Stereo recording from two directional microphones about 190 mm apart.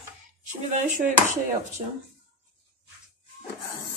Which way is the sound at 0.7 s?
40° right (ahead or behind).